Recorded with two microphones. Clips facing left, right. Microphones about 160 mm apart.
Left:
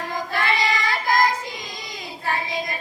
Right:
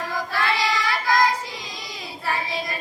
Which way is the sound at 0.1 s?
20° left (ahead or behind).